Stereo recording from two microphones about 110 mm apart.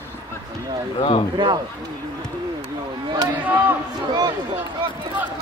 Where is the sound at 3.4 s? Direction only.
15° right (ahead or behind).